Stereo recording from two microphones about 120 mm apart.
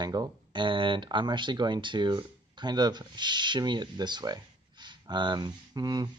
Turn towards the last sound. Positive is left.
turn(degrees=-35)  # may be behind; listen again after turning